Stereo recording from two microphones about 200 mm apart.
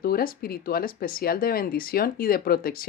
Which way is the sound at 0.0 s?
45° left (ahead or behind).